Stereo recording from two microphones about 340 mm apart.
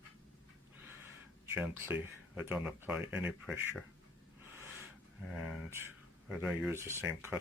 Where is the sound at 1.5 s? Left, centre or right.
Centre.